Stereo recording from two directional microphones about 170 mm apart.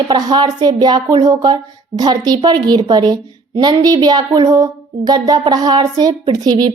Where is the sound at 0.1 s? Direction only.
25° right (ahead or behind).